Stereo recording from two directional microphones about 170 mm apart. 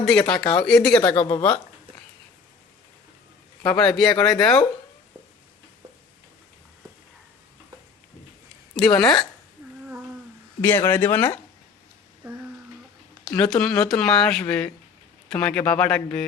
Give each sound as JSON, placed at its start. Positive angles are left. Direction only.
{"t": 0.0, "sound": "speech", "side_deg": 5}
{"t": 1.0, "sound": "speech", "side_deg": 30}
{"t": 1.4, "sound": "a man's voice", "side_deg": 10}
{"t": 3.8, "sound": "speech", "side_deg": 5}
{"t": 8.7, "sound": "speech", "side_deg": 5}
{"t": 10.6, "sound": "a man's voice", "side_deg": 10}
{"t": 13.3, "sound": "a man's voice", "side_deg": 5}